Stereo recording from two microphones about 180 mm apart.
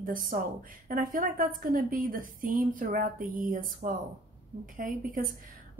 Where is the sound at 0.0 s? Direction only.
50° right (ahead or behind).